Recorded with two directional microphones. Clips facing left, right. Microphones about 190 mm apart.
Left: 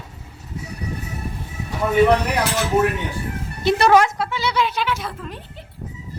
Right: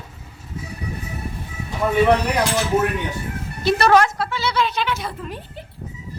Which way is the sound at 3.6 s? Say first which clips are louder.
Left 1 dB; 20° left (ahead or behind).